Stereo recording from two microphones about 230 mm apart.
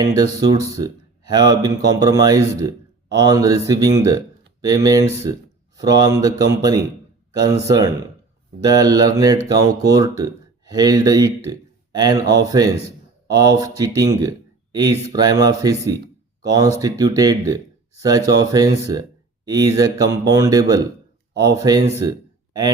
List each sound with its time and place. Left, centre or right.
0.0 s speech: centre